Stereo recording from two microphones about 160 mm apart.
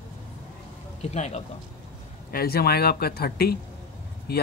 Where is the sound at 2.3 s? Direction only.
70° left (ahead or behind).